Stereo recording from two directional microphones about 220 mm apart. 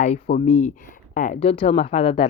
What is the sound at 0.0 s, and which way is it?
Speech, 30° left (ahead or behind).